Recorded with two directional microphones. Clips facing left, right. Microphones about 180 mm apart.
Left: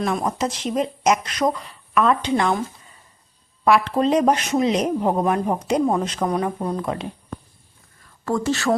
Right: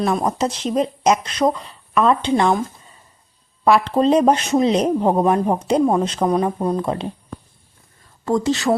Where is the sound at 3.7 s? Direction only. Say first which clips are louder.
Right 3 dB; 30° right (ahead or behind).